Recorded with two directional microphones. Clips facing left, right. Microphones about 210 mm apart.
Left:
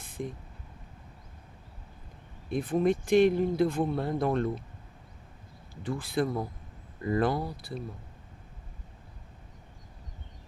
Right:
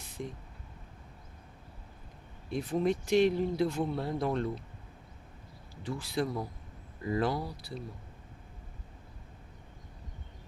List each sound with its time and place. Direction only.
0.0 s a sound: 50° left (ahead or behind)
2.5 s speech: 55° left (ahead or behind)
5.8 s speech: 55° left (ahead or behind)